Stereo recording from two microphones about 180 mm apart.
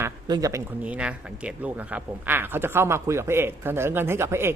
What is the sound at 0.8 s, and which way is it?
A man's voice, 5° right (ahead or behind).